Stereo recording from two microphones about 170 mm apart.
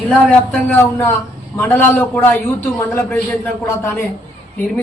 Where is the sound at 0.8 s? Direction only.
15° left (ahead or behind).